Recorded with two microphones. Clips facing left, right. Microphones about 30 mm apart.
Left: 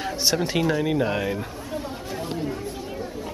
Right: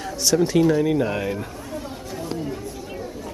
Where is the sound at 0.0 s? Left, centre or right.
Left.